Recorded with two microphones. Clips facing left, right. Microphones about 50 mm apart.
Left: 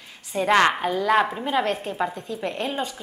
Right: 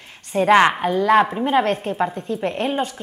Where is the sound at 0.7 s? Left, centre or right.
Centre.